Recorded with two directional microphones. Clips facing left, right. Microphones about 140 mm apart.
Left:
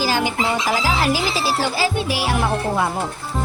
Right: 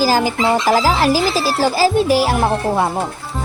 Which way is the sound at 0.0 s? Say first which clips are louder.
Right 5 dB; 40° right (ahead or behind).